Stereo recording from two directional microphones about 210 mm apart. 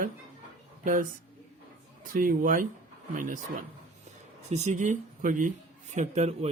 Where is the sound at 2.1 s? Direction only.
40° right (ahead or behind).